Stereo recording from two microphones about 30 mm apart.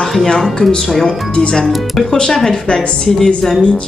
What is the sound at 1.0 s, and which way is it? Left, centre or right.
Speech, left.